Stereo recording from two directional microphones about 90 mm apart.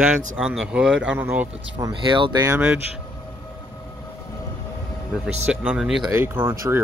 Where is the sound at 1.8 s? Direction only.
35° right (ahead or behind).